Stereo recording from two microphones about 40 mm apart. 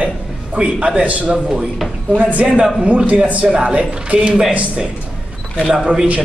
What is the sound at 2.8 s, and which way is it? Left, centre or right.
A man's voice, right.